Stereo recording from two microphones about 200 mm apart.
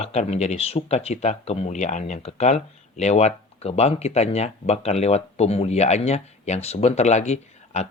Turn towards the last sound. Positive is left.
turn(degrees=35)  # may be behind; listen again after turning